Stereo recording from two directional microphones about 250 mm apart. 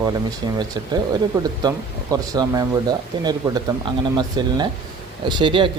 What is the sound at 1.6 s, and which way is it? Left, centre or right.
Speech, centre.